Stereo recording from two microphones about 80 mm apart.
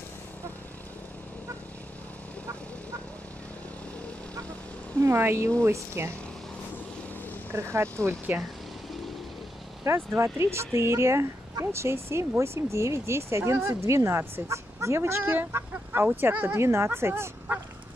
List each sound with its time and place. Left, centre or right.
5.0 s speech: right
7.5 s speech: right
8.3 s speech: right
9.8 s speech: right